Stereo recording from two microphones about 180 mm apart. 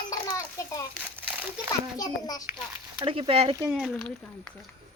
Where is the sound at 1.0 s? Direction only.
10° right (ahead or behind).